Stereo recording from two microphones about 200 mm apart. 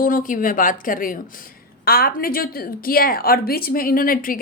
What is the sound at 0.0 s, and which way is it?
A woman's voice, 40° left (ahead or behind).